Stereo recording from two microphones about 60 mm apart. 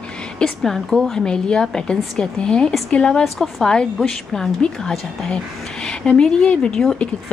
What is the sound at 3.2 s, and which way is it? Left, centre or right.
A woman's voice, centre.